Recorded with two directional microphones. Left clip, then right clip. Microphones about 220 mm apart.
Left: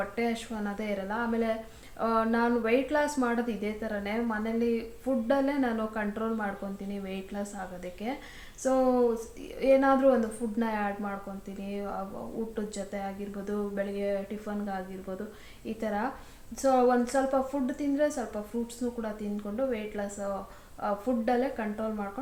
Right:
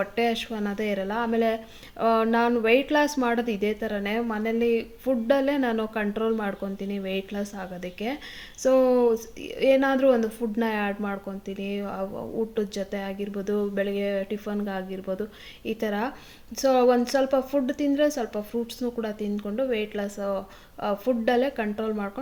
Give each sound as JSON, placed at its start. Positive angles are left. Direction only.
{"t": 0.2, "sound": "a woman's voice", "side_deg": -35}